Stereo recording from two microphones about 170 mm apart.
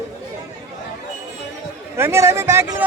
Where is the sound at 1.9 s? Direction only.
15° right (ahead or behind).